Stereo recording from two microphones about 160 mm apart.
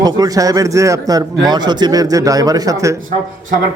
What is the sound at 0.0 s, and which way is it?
A man's voice, 25° right (ahead or behind).